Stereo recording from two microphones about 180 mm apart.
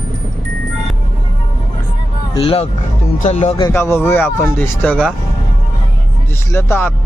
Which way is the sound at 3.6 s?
15° left (ahead or behind).